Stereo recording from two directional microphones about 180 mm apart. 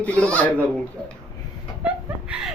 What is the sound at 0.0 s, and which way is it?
Speech, 5° left (ahead or behind).